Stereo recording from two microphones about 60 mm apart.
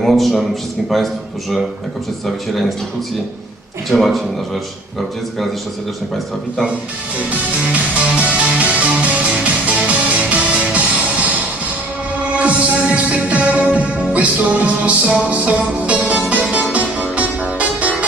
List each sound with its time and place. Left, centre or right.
0.0 s a man's voice: centre
3.8 s a man's voice: centre
7.2 s music: right
12.4 s music: right